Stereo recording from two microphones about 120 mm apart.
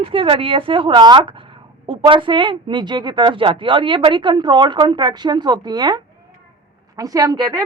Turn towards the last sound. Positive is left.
turn(degrees=-30)  # may be behind; listen again after turning